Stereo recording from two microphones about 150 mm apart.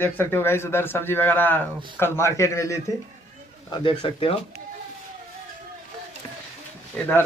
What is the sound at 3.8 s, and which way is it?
Speech, 35° left (ahead or behind).